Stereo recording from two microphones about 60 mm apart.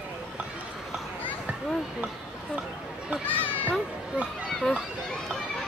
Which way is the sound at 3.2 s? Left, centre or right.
Left.